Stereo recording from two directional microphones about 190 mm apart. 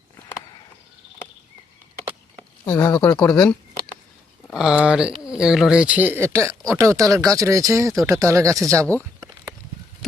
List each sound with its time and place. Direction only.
2.6 s speech: 20° left (ahead or behind)
4.4 s speech: 5° right (ahead or behind)
10.0 s a sound: centre (ahead or behind)